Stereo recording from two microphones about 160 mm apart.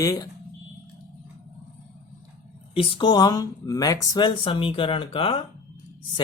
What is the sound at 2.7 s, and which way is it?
Speech, 30° left (ahead or behind).